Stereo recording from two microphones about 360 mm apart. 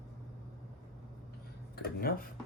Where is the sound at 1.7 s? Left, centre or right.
Left.